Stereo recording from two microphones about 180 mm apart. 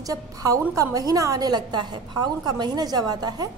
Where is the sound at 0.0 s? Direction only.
20° right (ahead or behind).